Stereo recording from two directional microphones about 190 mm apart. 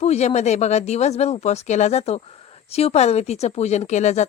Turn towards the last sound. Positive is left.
turn(degrees=35)  # may be behind; listen again after turning